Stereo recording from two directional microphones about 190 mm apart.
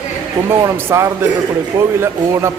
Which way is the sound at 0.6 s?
15° right (ahead or behind).